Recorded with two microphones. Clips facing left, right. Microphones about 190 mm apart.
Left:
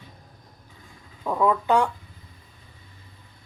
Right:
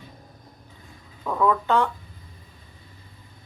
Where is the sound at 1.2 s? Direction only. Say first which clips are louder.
Even; 10° left (ahead or behind).